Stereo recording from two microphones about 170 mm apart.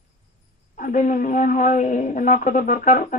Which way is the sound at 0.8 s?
50° left (ahead or behind).